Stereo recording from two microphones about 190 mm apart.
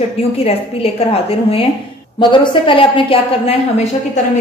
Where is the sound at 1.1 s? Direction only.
30° left (ahead or behind).